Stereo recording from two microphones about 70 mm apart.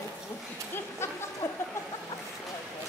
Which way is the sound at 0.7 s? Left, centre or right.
Left.